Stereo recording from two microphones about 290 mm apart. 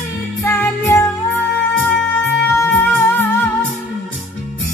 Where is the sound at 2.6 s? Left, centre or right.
Centre.